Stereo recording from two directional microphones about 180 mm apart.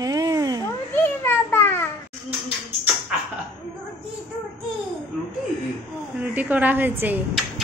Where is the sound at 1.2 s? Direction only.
10° left (ahead or behind).